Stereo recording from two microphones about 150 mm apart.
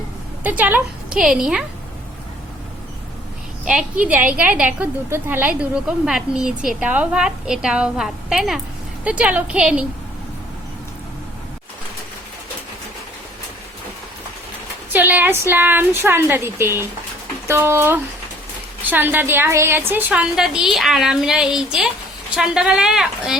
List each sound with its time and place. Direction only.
0.4 s a woman's voice: 10° right (ahead or behind)
3.7 s a woman's voice: 10° right (ahead or behind)
14.9 s a woman's voice: 10° right (ahead or behind)